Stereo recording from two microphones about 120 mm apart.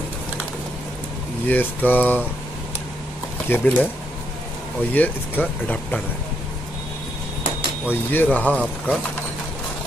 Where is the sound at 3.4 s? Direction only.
15° left (ahead or behind).